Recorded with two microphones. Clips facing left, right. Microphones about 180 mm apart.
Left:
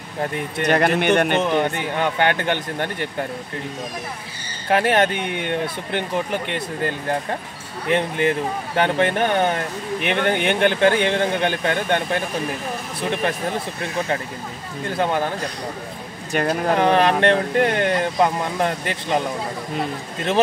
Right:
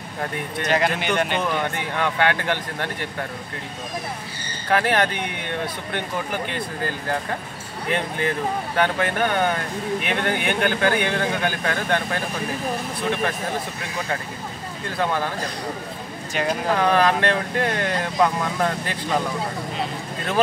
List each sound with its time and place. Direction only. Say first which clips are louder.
0.7 s speech: left 5 dB; 55° left (ahead or behind)
1.4 s speech: left 4 dB; 25° left (ahead or behind)
4.6 s speech: left 3 dB; 25° left (ahead or behind)
6.5 s speech: left 3 dB; 25° left (ahead or behind)
15.0 s speech: left 2 dB; 25° left (ahead or behind)
16.3 s speech: left 4 dB; 50° left (ahead or behind)
16.7 s speech: left 2 dB; 25° left (ahead or behind)